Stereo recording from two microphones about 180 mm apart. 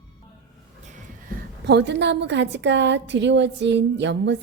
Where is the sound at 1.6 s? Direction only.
70° right (ahead or behind).